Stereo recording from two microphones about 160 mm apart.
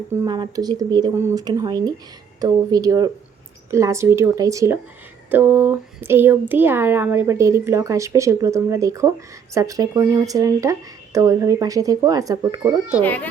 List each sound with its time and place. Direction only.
0.1 s speech: 20° right (ahead or behind)